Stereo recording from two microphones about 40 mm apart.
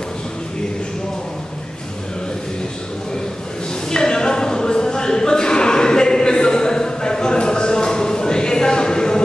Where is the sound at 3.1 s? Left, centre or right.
Centre.